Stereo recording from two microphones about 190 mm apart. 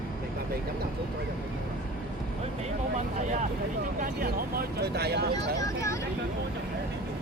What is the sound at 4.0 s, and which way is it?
Speech, 55° right (ahead or behind).